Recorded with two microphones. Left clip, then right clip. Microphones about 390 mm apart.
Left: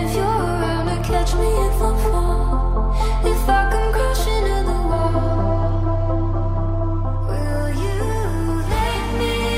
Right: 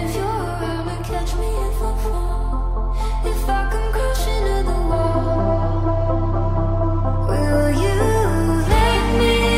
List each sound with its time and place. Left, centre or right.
0.1 s music: left
3.3 s music: left
4.8 s music: centre
7.4 s music: right